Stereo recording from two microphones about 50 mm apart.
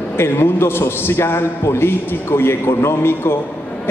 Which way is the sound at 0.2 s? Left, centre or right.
Left.